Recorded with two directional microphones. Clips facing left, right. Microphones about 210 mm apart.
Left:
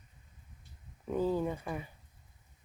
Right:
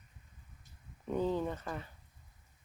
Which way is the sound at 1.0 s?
5° left (ahead or behind).